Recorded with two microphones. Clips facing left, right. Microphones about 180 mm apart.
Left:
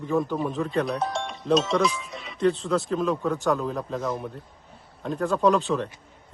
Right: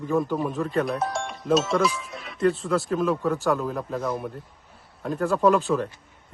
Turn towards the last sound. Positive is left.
turn(degrees=0)  # may be behind; listen again after turning